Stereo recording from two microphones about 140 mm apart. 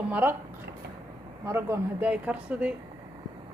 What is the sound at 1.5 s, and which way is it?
A man's voice, 20° right (ahead or behind).